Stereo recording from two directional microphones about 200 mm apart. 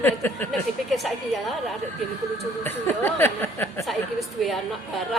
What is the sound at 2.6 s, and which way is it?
A woman's voice, 10° left (ahead or behind).